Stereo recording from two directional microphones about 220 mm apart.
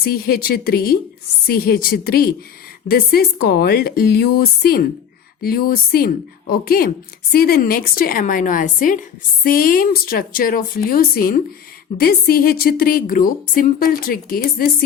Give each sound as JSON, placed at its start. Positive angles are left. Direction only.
{"t": 0.0, "sound": "speech", "side_deg": 45}